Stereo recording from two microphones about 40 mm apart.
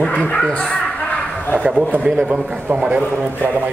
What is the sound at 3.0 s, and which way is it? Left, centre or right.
Speech, right.